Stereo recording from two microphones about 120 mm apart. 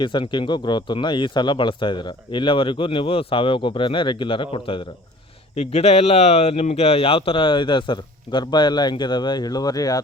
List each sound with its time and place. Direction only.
0.0 s speech: 40° left (ahead or behind)
5.5 s speech: 60° left (ahead or behind); by 10.0 s 30° left (ahead or behind)